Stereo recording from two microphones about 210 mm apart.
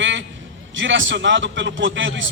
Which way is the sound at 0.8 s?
60° right (ahead or behind).